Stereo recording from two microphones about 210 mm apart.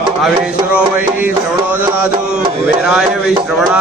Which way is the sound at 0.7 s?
10° right (ahead or behind).